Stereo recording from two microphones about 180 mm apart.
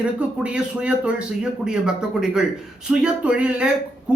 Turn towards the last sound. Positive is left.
turn(degrees=-5)  # may be behind; listen again after turning